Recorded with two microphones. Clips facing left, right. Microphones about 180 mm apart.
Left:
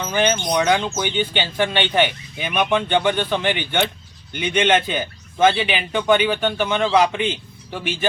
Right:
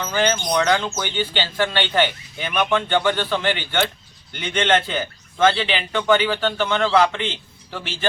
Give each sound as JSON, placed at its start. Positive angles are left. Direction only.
{"t": 0.0, "sound": "a man's voice", "side_deg": 15}